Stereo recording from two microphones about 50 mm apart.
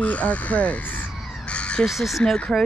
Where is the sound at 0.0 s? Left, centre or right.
Left.